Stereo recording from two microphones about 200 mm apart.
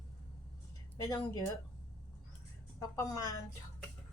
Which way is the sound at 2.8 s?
15° left (ahead or behind).